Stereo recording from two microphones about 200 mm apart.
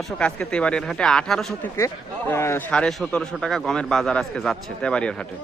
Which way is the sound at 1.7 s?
15° left (ahead or behind).